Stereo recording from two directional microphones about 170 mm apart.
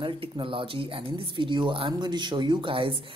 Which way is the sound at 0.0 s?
30° right (ahead or behind).